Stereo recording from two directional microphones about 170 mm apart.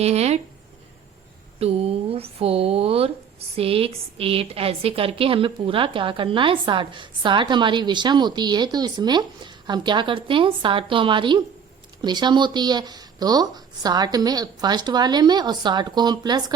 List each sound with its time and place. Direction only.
0.0 s speech: 40° right (ahead or behind)
1.5 s a woman's voice: 35° right (ahead or behind)